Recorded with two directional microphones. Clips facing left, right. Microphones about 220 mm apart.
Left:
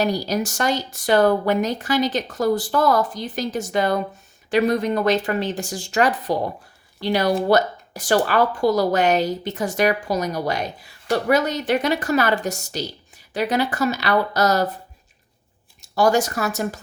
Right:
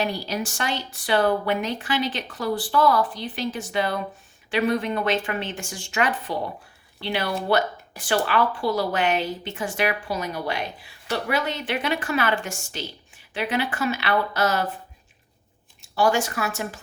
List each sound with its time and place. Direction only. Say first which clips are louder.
0.0 s speech: left 5 dB; 40° left (ahead or behind)
15.8 s speech: left 4 dB; 40° left (ahead or behind)